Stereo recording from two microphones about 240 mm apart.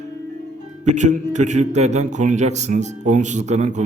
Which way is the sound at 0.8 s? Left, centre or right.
Right.